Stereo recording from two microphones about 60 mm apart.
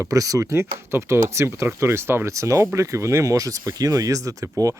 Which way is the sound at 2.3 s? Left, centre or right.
Right.